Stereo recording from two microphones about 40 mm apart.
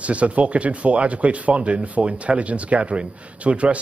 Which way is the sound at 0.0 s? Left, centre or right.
Right.